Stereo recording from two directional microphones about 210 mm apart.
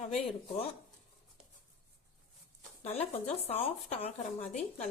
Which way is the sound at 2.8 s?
30° left (ahead or behind).